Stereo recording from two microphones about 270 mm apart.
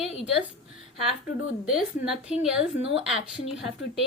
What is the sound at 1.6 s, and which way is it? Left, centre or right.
A woman's voice, centre.